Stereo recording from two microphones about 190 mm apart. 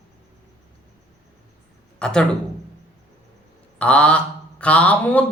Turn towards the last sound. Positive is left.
turn(degrees=10)  # may be behind; listen again after turning